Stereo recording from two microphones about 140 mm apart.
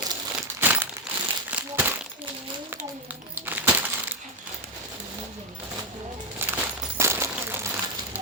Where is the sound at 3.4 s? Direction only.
10° right (ahead or behind).